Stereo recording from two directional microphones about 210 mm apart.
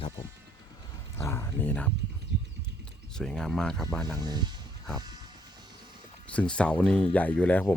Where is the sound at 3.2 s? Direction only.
5° left (ahead or behind).